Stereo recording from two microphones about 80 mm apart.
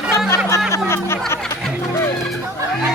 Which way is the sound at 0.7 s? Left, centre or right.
Left.